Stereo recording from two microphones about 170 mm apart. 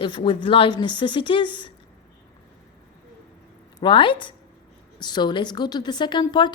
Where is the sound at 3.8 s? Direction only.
30° left (ahead or behind).